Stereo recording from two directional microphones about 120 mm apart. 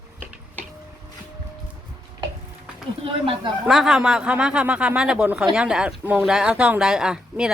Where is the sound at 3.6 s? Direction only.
5° right (ahead or behind).